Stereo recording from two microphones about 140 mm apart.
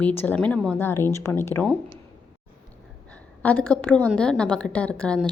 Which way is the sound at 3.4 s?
10° left (ahead or behind).